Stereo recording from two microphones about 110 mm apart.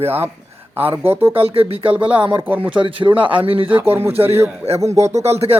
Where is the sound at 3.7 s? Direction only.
20° right (ahead or behind).